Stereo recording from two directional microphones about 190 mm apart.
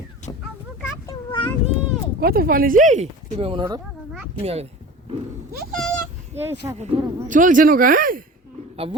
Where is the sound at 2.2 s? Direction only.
50° right (ahead or behind).